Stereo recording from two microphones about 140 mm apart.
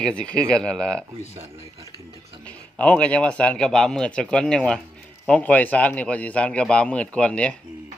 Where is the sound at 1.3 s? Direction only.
45° right (ahead or behind).